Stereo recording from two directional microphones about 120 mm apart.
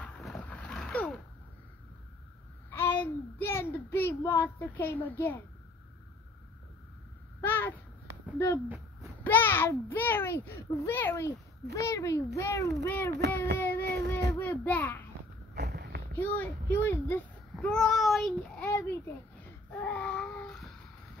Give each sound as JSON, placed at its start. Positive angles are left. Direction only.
{"t": 0.4, "sound": "a sound", "side_deg": 10}
{"t": 2.7, "sound": "a sound", "side_deg": 15}
{"t": 4.2, "sound": "speech", "side_deg": 20}
{"t": 7.4, "sound": "a sound", "side_deg": 15}
{"t": 9.2, "sound": "a child's voice", "side_deg": 15}
{"t": 16.1, "sound": "a child's voice", "side_deg": 15}
{"t": 17.6, "sound": "a child's voice", "side_deg": 5}
{"t": 18.6, "sound": "a child's voice", "side_deg": 20}
{"t": 19.8, "sound": "babbling", "side_deg": 15}